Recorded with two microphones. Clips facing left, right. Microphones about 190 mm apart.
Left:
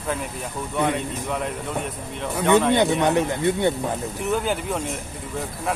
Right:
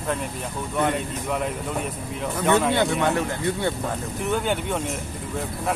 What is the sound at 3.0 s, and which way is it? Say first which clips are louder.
Speech: left 3 dB; 20° left (ahead or behind).